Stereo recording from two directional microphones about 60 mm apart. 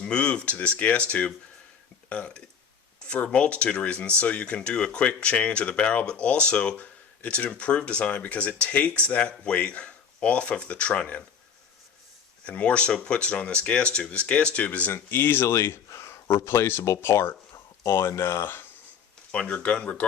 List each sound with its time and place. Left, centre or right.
0.0 s speech: centre
12.5 s speech: left
14.9 s speech: left
15.9 s speech: left
19.3 s speech: left